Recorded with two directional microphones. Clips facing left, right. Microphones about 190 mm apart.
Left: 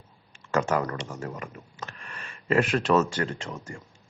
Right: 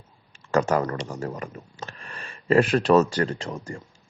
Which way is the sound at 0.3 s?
35° right (ahead or behind).